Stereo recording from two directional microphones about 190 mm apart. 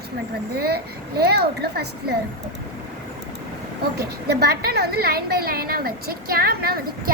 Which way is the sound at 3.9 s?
55° right (ahead or behind).